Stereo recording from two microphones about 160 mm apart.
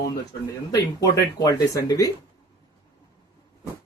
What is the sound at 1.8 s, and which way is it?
Speech, 20° left (ahead or behind).